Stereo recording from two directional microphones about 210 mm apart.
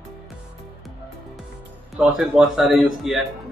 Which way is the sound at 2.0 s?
Centre (ahead or behind).